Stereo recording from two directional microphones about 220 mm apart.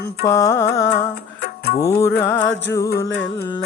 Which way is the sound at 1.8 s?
10° left (ahead or behind).